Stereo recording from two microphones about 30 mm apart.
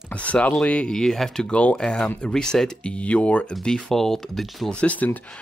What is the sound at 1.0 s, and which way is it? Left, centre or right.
Speech, centre.